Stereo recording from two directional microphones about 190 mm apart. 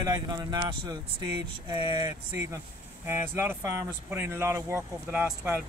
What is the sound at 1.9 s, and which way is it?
Speech, 15° right (ahead or behind).